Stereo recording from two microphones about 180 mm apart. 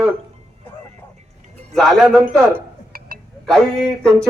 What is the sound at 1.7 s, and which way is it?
Speech, centre (ahead or behind).